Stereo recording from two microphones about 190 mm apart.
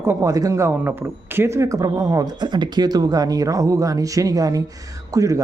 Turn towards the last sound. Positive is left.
turn(degrees=-15)  # may be behind; listen again after turning